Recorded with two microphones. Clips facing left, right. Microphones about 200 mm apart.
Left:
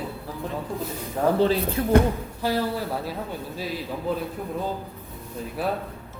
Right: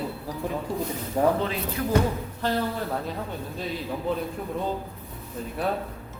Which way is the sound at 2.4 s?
10° left (ahead or behind).